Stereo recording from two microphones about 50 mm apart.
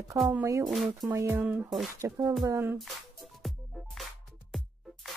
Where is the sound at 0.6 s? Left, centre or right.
Centre.